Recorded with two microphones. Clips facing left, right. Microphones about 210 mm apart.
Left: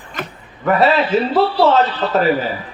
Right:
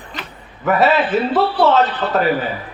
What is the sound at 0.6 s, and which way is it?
A man's voice, centre (ahead or behind).